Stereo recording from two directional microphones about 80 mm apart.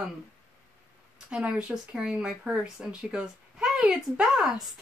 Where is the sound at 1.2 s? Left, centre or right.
Centre.